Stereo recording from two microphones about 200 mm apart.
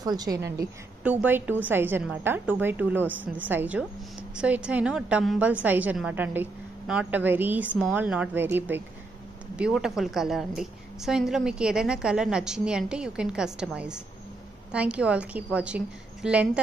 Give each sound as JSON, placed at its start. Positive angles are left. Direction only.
{"t": 0.0, "sound": "a woman's voice", "side_deg": -20}